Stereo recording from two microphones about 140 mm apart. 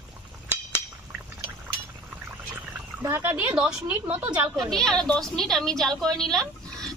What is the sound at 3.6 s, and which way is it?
Speech, 10° right (ahead or behind).